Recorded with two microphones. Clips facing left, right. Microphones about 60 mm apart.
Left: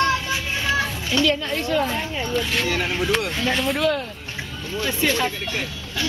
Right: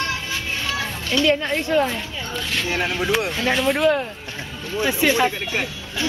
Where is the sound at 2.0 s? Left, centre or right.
Centre.